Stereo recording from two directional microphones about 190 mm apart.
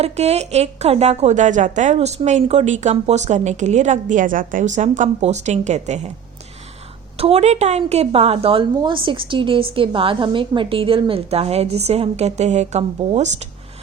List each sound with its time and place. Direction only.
0.0 s a woman's voice: 35° right (ahead or behind)
7.2 s a woman's voice: 35° right (ahead or behind)